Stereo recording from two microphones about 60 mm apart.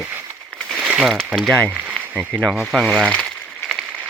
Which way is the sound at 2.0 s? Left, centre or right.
Right.